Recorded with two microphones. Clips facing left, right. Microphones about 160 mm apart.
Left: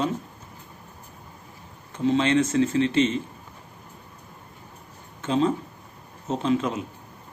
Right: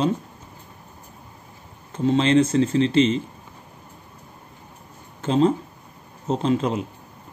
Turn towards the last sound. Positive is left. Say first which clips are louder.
# right 2 dB
turn(degrees=-35)  # may be behind; listen again after turning